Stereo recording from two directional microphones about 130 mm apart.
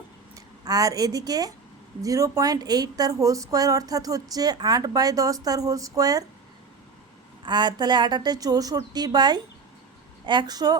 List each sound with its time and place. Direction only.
0.3 s a woman's voice: 30° right (ahead or behind)
7.4 s a woman's voice: 35° right (ahead or behind)